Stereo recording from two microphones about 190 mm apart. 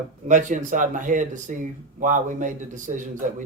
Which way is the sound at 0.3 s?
40° right (ahead or behind).